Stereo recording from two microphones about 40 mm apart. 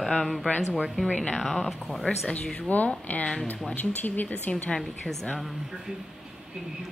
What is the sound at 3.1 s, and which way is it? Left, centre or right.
Speech, left.